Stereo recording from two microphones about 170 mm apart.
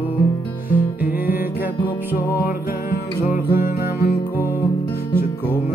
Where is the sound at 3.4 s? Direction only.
60° left (ahead or behind).